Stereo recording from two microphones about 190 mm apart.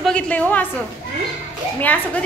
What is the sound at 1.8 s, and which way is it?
Speech, 10° left (ahead or behind).